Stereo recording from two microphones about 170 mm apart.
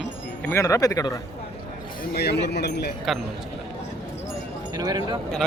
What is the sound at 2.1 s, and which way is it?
Speech, 75° left (ahead or behind).